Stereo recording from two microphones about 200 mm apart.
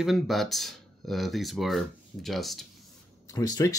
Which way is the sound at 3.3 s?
20° left (ahead or behind).